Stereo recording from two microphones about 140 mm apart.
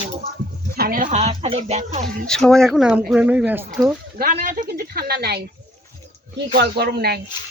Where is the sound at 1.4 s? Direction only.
50° right (ahead or behind).